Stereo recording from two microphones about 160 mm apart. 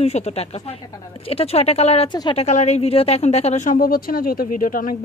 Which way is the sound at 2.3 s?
45° left (ahead or behind).